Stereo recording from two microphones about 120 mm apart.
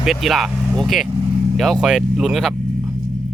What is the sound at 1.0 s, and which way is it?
Vehicle, 40° right (ahead or behind).